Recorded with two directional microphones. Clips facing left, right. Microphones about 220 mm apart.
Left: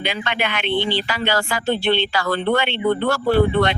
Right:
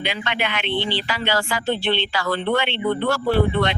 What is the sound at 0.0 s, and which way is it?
Speech, 45° left (ahead or behind).